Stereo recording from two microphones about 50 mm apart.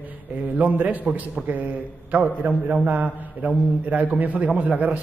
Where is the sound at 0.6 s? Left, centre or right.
Right.